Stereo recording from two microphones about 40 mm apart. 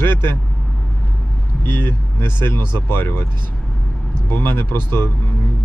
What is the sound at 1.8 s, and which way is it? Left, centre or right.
Speech, left.